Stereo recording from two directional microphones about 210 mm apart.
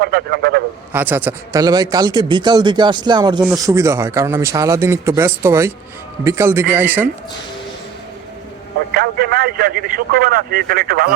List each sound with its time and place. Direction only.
0.0 s speech: 50° right (ahead or behind)
0.9 s a man's voice: 10° right (ahead or behind)
8.9 s speech: 45° right (ahead or behind)